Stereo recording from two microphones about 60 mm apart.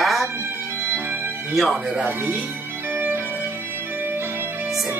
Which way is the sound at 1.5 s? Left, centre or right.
Centre.